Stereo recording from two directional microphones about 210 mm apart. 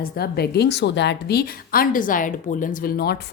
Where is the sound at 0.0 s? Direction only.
50° left (ahead or behind).